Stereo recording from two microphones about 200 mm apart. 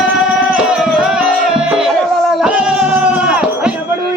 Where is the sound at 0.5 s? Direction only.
5° right (ahead or behind).